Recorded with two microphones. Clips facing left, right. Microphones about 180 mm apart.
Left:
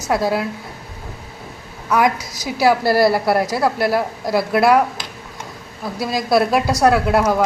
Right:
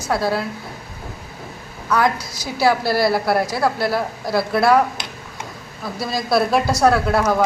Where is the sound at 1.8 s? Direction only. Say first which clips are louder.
Left 2 dB; 20° left (ahead or behind).